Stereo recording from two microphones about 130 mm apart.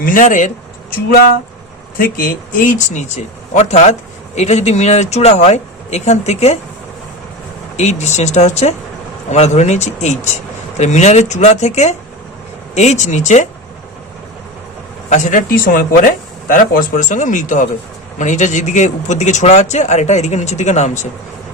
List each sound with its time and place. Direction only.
0.0 s speech: 90° left
2.0 s speech: 90° left; by 6.6 s 55° left (ahead or behind)
7.8 s speech: 60° left (ahead or behind)
15.1 s speech: 80° left